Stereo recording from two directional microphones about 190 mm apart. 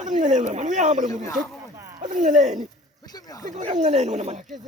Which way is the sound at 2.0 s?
40° right (ahead or behind).